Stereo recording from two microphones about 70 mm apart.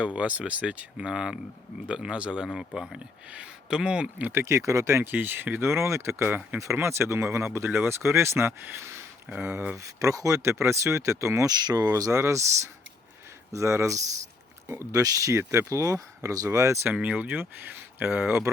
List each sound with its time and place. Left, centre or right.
0.0 s speech: centre
4.2 s speech: right
5.1 s speech: right
6.2 s speech: right
6.7 s speech: right
9.7 s speech: right
11.4 s speech: right
12.1 s speech: right
14.9 s speech: right
16.9 s speech: right